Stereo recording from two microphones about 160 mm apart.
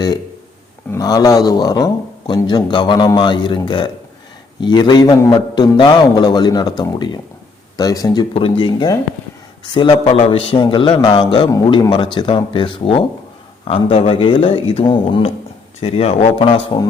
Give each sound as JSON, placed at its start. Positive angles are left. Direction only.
{"t": 0.9, "sound": "a man's voice", "side_deg": 20}
{"t": 15.8, "sound": "a man's voice", "side_deg": 40}